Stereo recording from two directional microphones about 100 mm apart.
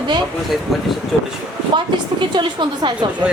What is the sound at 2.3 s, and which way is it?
Speech, 50° right (ahead or behind).